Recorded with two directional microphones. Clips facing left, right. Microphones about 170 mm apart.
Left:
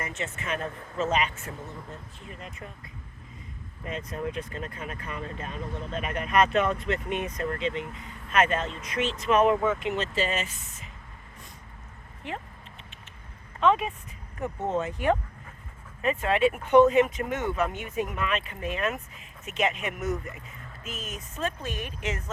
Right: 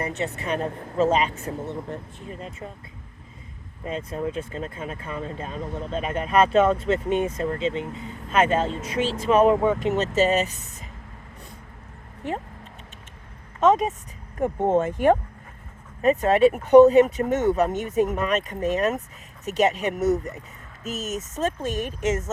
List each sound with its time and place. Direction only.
0.0 s speech: 35° right (ahead or behind)
3.8 s speech: 30° right (ahead or behind)
13.6 s speech: 40° right (ahead or behind)